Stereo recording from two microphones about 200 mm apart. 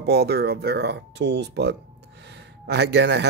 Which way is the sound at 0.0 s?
55° right (ahead or behind).